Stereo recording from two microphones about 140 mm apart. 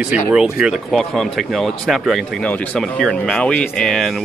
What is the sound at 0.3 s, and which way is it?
Speech, 5° right (ahead or behind).